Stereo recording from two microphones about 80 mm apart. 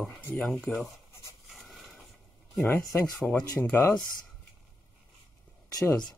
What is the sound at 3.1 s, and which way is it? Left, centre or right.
Mantra, centre.